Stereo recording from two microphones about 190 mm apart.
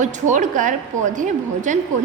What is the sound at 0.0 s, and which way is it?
A woman's voice, 40° right (ahead or behind).